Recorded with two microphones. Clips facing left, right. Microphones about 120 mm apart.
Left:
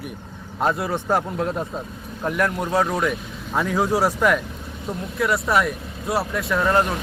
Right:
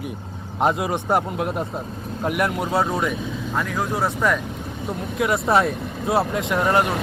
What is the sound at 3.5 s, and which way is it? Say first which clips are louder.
Speech: left 5 dB; 15° left (ahead or behind).